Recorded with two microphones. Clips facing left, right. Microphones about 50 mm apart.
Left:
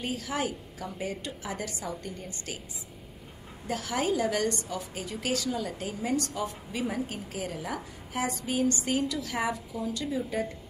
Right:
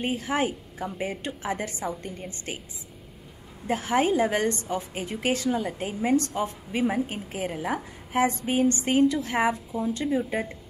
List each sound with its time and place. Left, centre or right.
0.0 s a woman's voice: right
3.6 s a woman's voice: right